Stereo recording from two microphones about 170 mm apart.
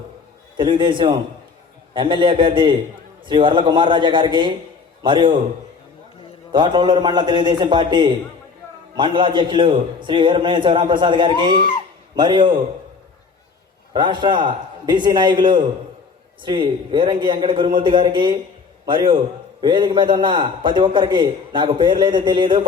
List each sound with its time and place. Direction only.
0.5 s a man's voice: 30° right (ahead or behind)
6.5 s a man's voice: 25° right (ahead or behind)
13.9 s a man's voice: 30° right (ahead or behind)